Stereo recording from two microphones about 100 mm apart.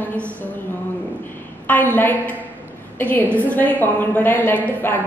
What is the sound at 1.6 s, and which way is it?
A woman's voice, 15° left (ahead or behind).